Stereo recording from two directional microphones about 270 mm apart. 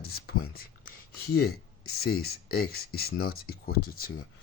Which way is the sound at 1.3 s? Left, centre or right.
Left.